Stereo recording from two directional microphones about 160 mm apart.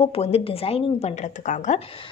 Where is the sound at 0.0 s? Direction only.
40° left (ahead or behind).